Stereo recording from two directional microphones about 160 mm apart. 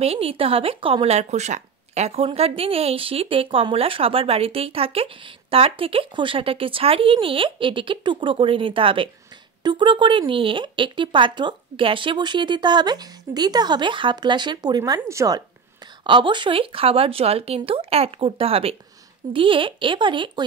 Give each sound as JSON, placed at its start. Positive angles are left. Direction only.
{"t": 0.0, "sound": "speech", "side_deg": -40}